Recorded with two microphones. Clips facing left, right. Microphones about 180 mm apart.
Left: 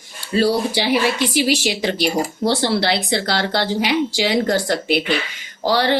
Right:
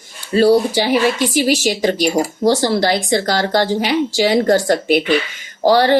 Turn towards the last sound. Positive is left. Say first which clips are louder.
# right 6 dB
turn(degrees=-45)  # may be behind; listen again after turning